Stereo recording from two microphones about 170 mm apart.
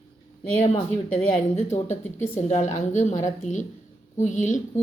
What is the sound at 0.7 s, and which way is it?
Speech, 35° left (ahead or behind).